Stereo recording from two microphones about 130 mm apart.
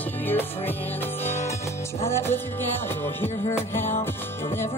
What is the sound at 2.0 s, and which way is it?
Music, 20° left (ahead or behind).